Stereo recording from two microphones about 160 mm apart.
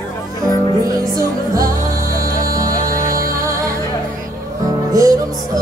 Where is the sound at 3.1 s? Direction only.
60° right (ahead or behind).